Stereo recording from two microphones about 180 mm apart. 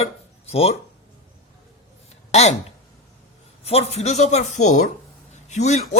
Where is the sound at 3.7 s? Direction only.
35° left (ahead or behind).